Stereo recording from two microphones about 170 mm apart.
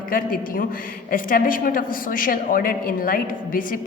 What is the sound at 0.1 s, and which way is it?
A man's voice, 55° left (ahead or behind).